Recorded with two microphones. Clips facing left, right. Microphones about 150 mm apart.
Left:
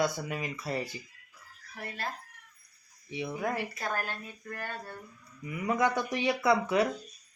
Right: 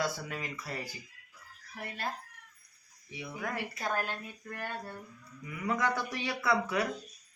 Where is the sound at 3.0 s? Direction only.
25° left (ahead or behind).